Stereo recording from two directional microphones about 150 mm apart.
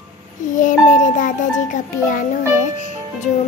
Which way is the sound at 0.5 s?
60° left (ahead or behind).